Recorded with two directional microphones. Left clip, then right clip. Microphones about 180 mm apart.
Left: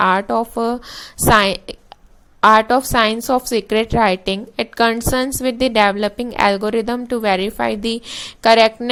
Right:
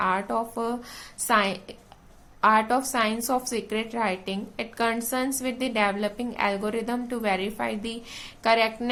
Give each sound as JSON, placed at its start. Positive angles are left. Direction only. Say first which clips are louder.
{"t": 0.0, "sound": "a woman's voice", "louder": "left 10 dB", "side_deg": 45}